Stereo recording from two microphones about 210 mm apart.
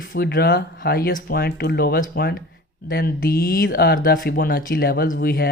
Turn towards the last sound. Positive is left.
turn(degrees=45)  # may be behind; listen again after turning